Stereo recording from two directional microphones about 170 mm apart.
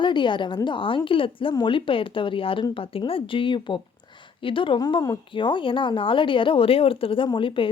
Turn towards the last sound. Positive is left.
turn(degrees=30)  # may be behind; listen again after turning